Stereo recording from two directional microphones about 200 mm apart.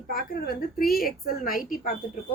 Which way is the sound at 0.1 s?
50° left (ahead or behind).